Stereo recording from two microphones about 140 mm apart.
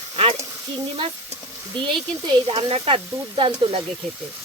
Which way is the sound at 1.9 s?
40° right (ahead or behind).